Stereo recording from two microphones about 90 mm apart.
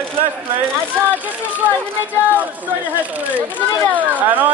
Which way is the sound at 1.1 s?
15° right (ahead or behind).